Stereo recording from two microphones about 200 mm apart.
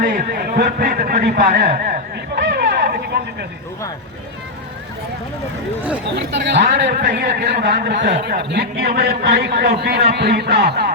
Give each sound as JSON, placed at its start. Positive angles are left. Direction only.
{"t": 0.0, "sound": "a man's voice", "side_deg": -50}
{"t": 6.1, "sound": "a man's voice", "side_deg": -60}